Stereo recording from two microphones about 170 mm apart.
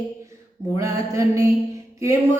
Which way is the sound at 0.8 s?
15° right (ahead or behind).